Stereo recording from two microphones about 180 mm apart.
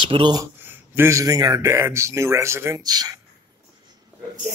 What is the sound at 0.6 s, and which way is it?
Speech, 10° right (ahead or behind).